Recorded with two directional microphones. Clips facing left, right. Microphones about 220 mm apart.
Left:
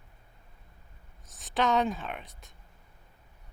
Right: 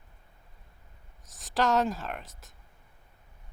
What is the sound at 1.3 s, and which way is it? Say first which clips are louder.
A woman's voice: right 1 dB; centre (ahead or behind).